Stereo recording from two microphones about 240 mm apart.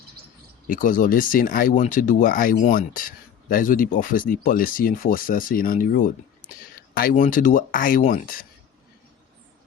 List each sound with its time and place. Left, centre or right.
0.7 s speech: left